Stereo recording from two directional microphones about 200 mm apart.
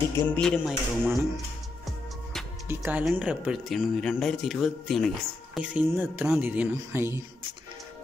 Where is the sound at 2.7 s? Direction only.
10° right (ahead or behind).